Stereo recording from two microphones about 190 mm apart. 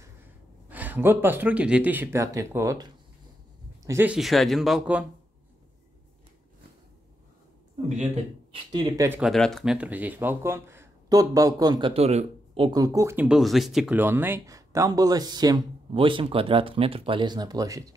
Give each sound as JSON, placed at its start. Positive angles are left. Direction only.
{"t": 0.7, "sound": "speech", "side_deg": -10}
{"t": 8.7, "sound": "speech", "side_deg": -20}
{"t": 9.2, "sound": "speech", "side_deg": 0}